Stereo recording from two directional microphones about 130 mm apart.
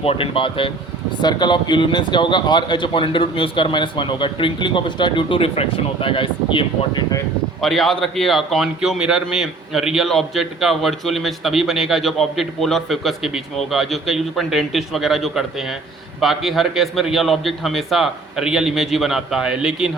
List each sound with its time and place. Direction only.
0.0 s speech: 45° left (ahead or behind)
7.6 s a man's voice: centre (ahead or behind)